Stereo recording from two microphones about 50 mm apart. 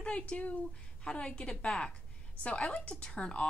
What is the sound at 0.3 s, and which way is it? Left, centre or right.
Speech, left.